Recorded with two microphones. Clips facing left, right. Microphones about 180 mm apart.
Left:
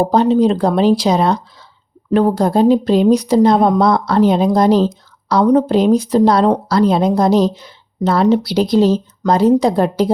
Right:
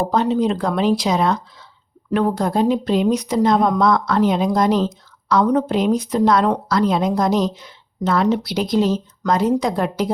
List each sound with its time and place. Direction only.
0.0 s speech: 35° left (ahead or behind)